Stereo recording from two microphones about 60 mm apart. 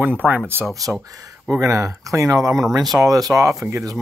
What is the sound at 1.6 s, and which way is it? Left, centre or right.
Speech, right.